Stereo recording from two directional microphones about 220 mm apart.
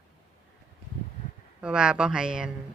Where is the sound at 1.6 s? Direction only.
5° right (ahead or behind).